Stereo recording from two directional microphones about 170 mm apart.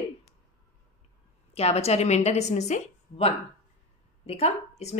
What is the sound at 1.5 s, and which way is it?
Speech, 35° left (ahead or behind).